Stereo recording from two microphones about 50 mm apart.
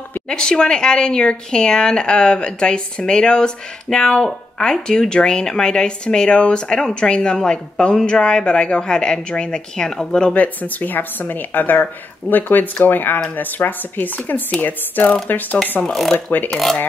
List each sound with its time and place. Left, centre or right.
0.3 s a woman's voice: centre
10.3 s speech: left
15.9 s speech: centre